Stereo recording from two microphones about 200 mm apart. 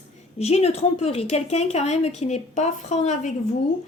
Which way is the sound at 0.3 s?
30° left (ahead or behind).